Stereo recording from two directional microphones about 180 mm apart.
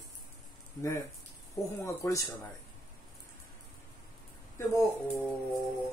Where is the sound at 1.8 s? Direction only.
15° left (ahead or behind).